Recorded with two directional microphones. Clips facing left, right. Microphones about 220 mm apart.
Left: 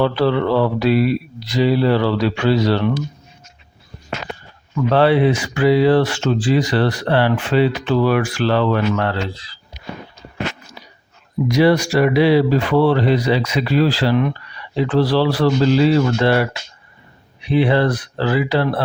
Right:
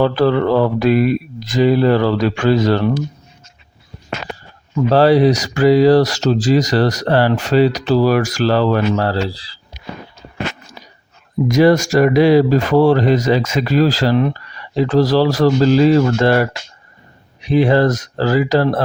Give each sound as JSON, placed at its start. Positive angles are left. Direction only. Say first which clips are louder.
{"t": 0.0, "sound": "speech", "louder": "right 3 dB", "side_deg": -45}
{"t": 4.7, "sound": "speech", "louder": "right 3 dB", "side_deg": -35}
{"t": 10.8, "sound": "a sound", "louder": "right 1 dB", "side_deg": -45}
{"t": 11.4, "sound": "speech", "louder": "right 3 dB", "side_deg": -45}